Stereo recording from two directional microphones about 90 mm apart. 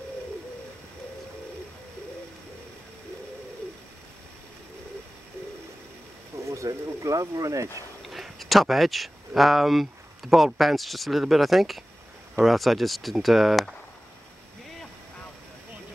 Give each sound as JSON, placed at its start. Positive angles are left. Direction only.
{"t": 6.4, "sound": "speech", "side_deg": -35}
{"t": 8.1, "sound": "speech", "side_deg": 0}